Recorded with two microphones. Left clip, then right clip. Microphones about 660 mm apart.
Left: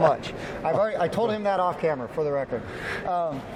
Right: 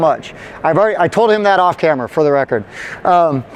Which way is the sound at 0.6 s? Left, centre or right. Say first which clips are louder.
Right 12 dB; right.